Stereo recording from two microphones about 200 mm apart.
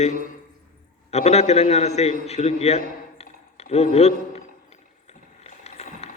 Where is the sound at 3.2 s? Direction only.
30° left (ahead or behind).